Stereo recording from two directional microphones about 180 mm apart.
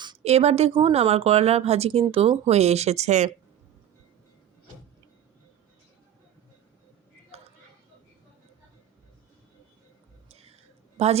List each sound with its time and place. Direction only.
0.2 s a woman's voice: 35° right (ahead or behind)
7.3 s a sound: 35° right (ahead or behind)
10.2 s whispering: 35° right (ahead or behind)
10.9 s a woman's voice: 35° right (ahead or behind)